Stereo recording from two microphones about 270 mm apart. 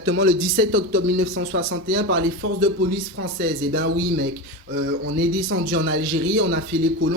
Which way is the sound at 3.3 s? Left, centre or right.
Right.